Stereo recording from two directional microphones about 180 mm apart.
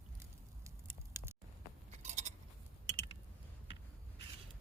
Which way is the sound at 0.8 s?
15° right (ahead or behind).